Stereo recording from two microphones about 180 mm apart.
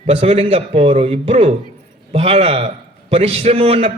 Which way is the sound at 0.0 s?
35° right (ahead or behind).